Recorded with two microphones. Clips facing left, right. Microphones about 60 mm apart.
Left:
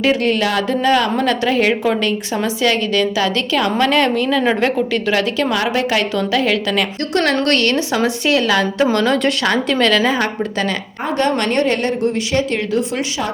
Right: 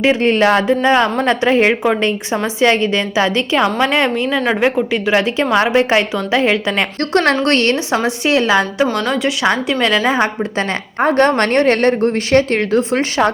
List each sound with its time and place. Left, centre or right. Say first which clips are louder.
0.0 s a woman's voice: right 3 dB; right
9.0 s speech: left 2 dB; centre
9.4 s a woman's voice: even; centre
11.0 s a woman's voice: right 5 dB; right